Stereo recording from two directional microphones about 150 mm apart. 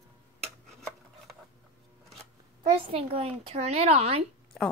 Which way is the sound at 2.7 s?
40° right (ahead or behind).